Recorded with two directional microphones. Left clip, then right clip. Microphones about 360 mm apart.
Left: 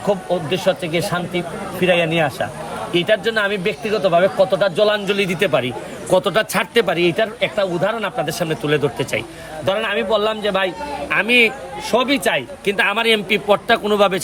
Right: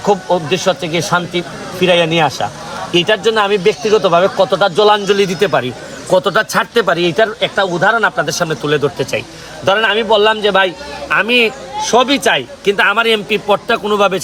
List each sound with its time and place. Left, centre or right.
0.1 s speech: centre